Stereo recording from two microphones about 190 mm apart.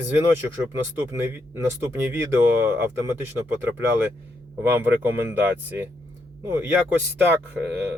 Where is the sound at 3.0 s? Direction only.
15° right (ahead or behind).